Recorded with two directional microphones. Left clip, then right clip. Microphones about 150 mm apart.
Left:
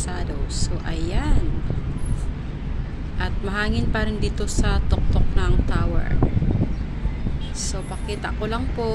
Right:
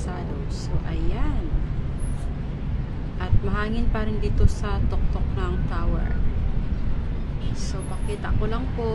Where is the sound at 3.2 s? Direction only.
10° left (ahead or behind).